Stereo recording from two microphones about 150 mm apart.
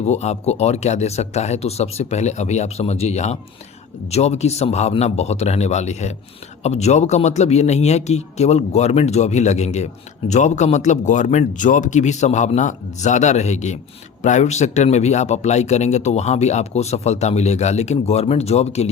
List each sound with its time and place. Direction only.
0.0 s a man's voice: 45° left (ahead or behind)